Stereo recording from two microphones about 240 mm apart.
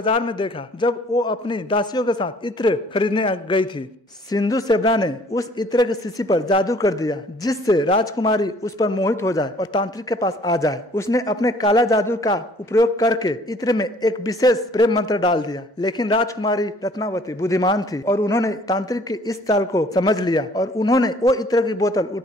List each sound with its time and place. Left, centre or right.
0.0 s a man's voice: left